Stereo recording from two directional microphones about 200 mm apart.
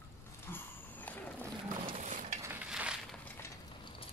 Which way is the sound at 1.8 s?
35° right (ahead or behind).